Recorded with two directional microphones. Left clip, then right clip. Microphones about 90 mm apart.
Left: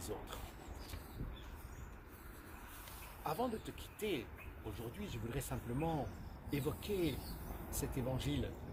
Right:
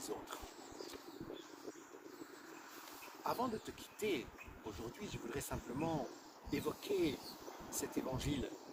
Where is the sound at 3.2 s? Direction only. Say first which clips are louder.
Even; 40° right (ahead or behind).